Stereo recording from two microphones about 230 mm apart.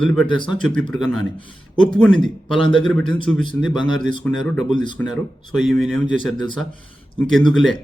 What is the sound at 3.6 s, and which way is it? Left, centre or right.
Speech, centre.